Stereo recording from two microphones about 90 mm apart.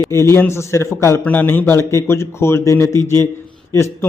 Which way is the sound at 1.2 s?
20° left (ahead or behind).